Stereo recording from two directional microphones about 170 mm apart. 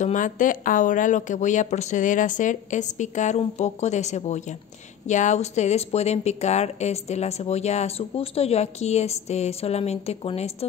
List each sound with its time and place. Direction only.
0.0 s speech: 50° left (ahead or behind)